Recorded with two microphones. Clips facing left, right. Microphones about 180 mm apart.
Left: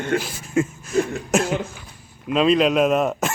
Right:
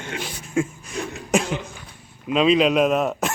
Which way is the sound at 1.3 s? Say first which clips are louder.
Left 2 dB; 5° left (ahead or behind).